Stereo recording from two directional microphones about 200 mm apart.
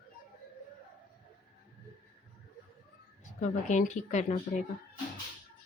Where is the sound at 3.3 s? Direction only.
35° left (ahead or behind).